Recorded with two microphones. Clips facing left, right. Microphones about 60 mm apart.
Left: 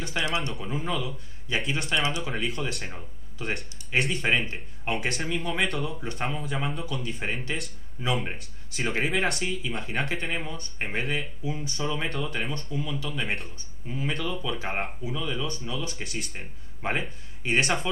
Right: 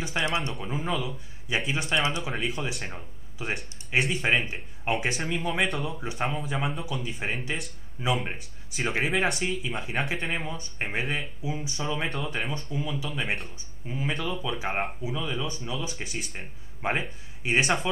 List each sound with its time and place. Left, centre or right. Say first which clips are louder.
0.2 s speech: right 1 dB; centre
0.5 s speech: even; centre
2.0 s speech: right 1 dB; right
2.2 s speech: even; centre